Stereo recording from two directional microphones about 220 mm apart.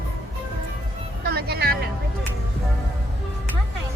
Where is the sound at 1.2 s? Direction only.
45° right (ahead or behind).